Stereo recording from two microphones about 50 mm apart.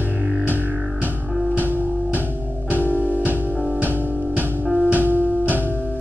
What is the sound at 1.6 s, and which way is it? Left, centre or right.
Music, right.